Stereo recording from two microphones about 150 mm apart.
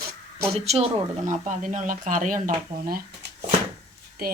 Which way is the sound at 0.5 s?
45° right (ahead or behind).